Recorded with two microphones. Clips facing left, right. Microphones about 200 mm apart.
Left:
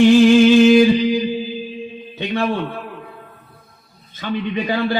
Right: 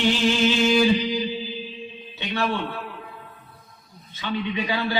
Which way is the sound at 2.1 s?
50° left (ahead or behind).